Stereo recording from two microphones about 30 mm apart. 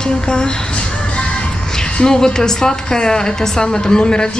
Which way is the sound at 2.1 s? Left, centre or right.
Left.